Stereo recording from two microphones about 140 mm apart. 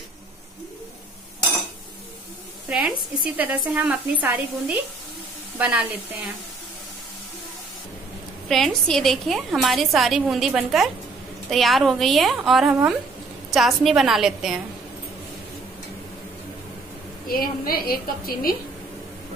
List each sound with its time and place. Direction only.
3.3 s speech: 10° right (ahead or behind)
8.5 s a woman's voice: centre (ahead or behind)
17.3 s a woman's voice: 90° left